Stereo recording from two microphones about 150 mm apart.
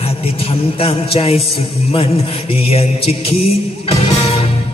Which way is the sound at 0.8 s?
40° left (ahead or behind).